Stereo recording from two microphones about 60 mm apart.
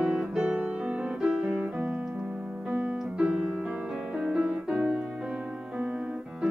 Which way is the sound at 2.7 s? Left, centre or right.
Right.